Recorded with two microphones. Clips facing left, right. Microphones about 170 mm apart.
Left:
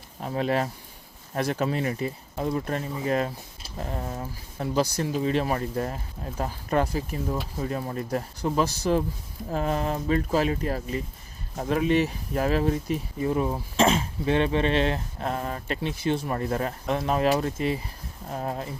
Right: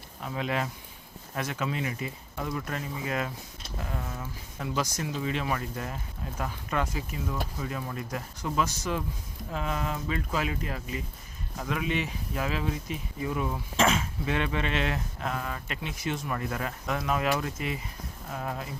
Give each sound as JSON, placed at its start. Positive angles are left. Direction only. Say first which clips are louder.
{"t": 0.2, "sound": "speech", "louder": "left 5 dB", "side_deg": 40}